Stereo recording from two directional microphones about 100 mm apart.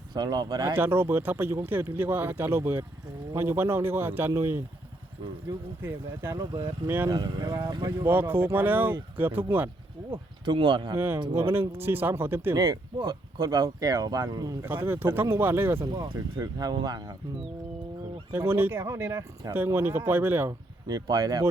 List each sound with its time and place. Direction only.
0.1 s speech: 45° right (ahead or behind)
0.6 s speech: 25° right (ahead or behind)
7.1 s speech: 45° right (ahead or behind)
8.0 s speech: 20° right (ahead or behind)
10.1 s speech: 55° right (ahead or behind)
10.9 s speech: 20° right (ahead or behind)
12.5 s speech: 35° right (ahead or behind)
14.6 s speech: 20° right (ahead or behind)
16.4 s speech: 40° right (ahead or behind)
18.3 s speech: 25° right (ahead or behind)
20.5 s speech: 40° right (ahead or behind)